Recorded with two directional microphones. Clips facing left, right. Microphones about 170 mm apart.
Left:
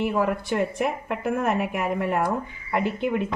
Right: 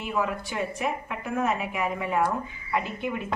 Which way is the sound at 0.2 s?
60° left (ahead or behind).